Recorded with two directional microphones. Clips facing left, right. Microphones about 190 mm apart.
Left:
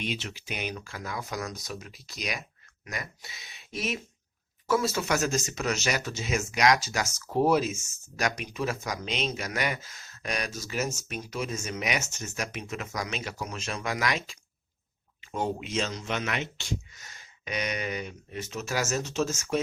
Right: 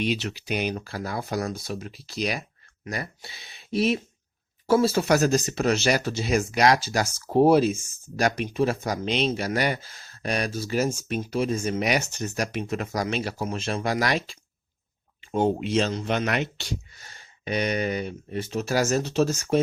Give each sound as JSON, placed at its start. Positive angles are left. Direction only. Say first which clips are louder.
{"t": 0.1, "sound": "speech", "louder": "right 7 dB", "side_deg": -70}
{"t": 0.3, "sound": "speech", "louder": "right 8 dB", "side_deg": -35}